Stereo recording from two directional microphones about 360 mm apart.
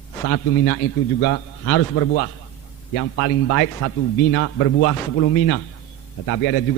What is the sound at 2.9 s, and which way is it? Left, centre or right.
A man's voice, left.